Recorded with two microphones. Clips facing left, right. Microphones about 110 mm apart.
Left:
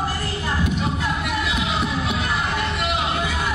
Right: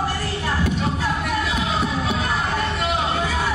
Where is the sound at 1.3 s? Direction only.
40° right (ahead or behind).